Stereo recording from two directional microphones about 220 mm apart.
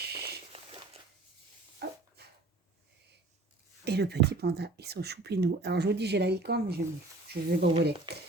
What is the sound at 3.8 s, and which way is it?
Speech, 45° right (ahead or behind).